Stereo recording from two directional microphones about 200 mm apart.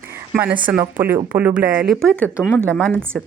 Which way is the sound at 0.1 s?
10° right (ahead or behind).